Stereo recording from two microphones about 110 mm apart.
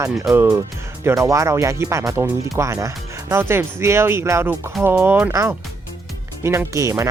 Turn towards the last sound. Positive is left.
turn(degrees=-25)  # may be behind; listen again after turning